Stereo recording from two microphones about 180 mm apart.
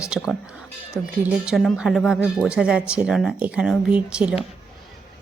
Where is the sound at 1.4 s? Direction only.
Centre (ahead or behind).